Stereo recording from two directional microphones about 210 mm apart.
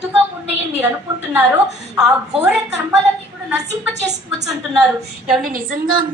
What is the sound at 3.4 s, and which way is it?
Speech, 5° right (ahead or behind).